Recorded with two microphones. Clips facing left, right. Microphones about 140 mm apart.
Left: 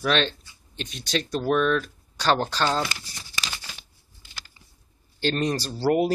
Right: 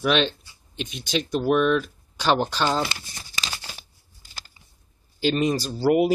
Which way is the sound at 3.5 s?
35° right (ahead or behind).